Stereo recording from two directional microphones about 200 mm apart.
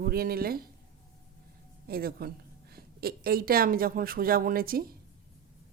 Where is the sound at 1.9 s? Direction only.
50° right (ahead or behind).